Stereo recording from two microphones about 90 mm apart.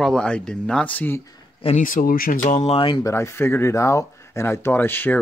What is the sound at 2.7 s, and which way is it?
Speech, 75° left (ahead or behind).